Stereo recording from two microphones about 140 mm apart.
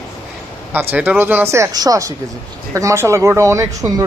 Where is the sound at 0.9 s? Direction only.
15° right (ahead or behind).